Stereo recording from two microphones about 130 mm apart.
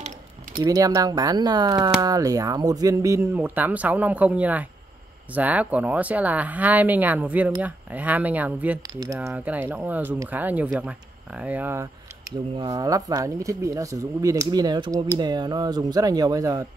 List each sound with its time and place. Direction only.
0.7 s speech: 25° right (ahead or behind); by 8.7 s 10° right (ahead or behind)
8.8 s speech: 30° right (ahead or behind)
9.3 s speech: 10° right (ahead or behind)
12.5 s speech: 35° right (ahead or behind)